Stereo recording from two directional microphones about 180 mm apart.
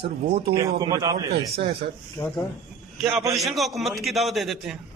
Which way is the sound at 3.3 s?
Centre (ahead or behind).